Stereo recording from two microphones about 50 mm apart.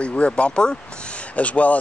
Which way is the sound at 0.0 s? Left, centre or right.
Left.